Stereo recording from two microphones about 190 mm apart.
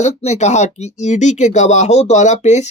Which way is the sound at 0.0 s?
35° left (ahead or behind).